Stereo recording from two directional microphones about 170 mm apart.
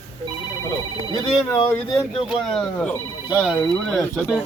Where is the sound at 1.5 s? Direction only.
15° left (ahead or behind).